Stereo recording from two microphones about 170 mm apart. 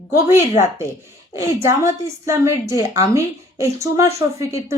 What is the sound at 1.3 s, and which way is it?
A woman's voice, 15° right (ahead or behind).